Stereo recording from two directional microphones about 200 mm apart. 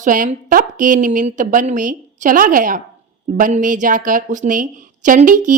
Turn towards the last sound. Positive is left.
turn(degrees=-40)  # may be behind; listen again after turning